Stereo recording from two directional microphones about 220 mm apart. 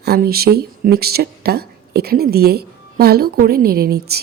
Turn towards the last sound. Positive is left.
turn(degrees=-45)  # may be behind; listen again after turning